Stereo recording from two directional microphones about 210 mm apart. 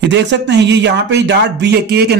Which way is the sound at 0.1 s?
55° right (ahead or behind).